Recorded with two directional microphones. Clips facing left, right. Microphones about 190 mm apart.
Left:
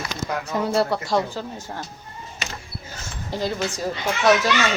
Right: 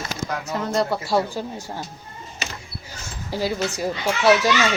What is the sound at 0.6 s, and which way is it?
Speech, 5° left (ahead or behind).